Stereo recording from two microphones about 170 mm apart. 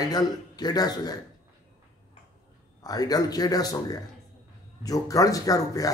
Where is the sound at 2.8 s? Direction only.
20° left (ahead or behind).